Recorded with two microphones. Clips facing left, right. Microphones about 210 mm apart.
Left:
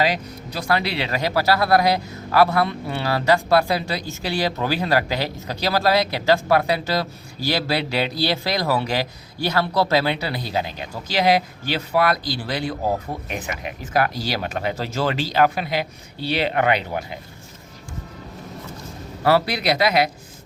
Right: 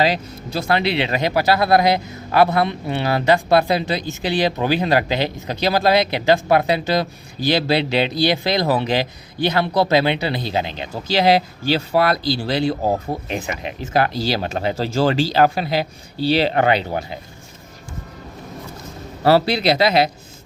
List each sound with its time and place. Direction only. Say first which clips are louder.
0.0 s speech: right 3 dB; 25° right (ahead or behind)
19.2 s speech: right 4 dB; 30° right (ahead or behind)